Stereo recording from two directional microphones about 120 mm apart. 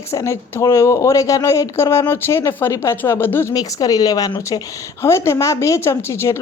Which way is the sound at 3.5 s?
30° left (ahead or behind).